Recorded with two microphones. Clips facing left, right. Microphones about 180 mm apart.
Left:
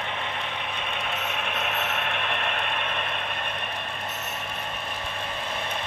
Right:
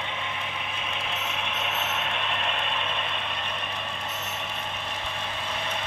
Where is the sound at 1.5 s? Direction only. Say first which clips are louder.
Left 2 dB; 55° left (ahead or behind).